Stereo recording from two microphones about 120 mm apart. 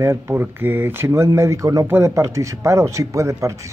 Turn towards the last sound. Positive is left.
turn(degrees=-25)  # may be behind; listen again after turning